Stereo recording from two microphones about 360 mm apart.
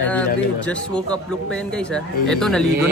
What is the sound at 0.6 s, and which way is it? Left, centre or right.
Speech, centre.